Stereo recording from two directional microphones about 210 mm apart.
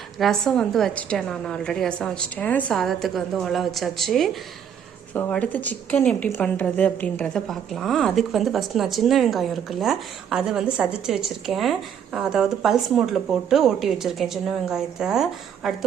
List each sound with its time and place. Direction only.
0.2 s a woman's voice: centre (ahead or behind)